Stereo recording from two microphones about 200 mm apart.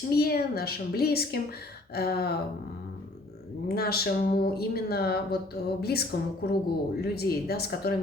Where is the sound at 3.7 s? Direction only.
50° left (ahead or behind).